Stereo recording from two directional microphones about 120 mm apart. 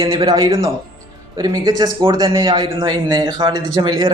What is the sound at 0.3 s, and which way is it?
A man's voice, 35° right (ahead or behind).